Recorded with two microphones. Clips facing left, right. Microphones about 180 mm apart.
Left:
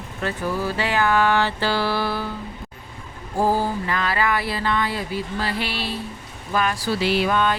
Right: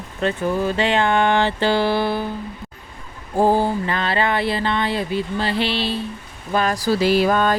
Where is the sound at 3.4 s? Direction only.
25° right (ahead or behind).